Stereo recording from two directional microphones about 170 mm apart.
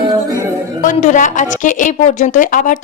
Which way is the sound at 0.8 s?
50° left (ahead or behind).